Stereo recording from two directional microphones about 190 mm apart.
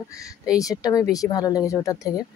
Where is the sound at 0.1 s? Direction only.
15° left (ahead or behind).